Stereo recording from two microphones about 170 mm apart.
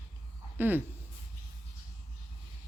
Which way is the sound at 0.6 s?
10° right (ahead or behind).